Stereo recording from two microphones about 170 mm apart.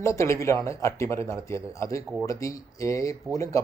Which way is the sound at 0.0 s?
15° left (ahead or behind).